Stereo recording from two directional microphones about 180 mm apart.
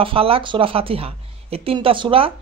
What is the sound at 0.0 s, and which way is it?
Speech, 30° right (ahead or behind).